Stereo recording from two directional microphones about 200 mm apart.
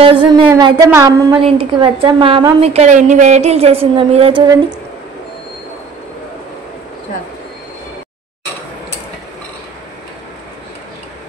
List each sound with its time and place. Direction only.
0.3 s a woman's voice: 20° right (ahead or behind)
1.3 s a woman's voice: 25° right (ahead or behind)